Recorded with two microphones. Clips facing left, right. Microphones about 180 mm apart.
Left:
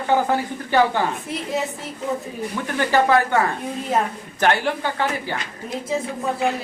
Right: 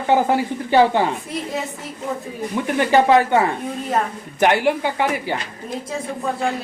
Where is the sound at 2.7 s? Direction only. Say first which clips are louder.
Right 3 dB; 20° right (ahead or behind).